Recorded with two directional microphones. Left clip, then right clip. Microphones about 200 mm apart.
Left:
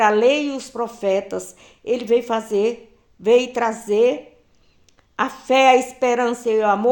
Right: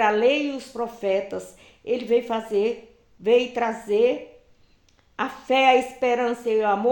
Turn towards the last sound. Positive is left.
turn(degrees=40)  # may be behind; listen again after turning